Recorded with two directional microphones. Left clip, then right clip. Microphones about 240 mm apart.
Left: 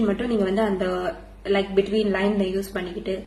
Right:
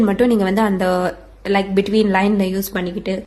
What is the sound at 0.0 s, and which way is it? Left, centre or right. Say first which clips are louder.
A woman's voice: right 7 dB; right.